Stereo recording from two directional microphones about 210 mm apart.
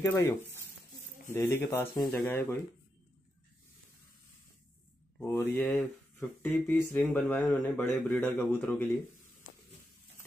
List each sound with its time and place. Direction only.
0.0 s speech: 10° left (ahead or behind)
1.3 s speech: 10° left (ahead or behind)
5.2 s speech: 10° left (ahead or behind)